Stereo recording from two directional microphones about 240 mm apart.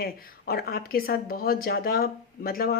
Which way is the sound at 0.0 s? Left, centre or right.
Left.